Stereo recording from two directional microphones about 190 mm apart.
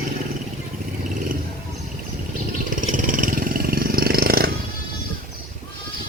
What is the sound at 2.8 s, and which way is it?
Vehicle, 45° right (ahead or behind).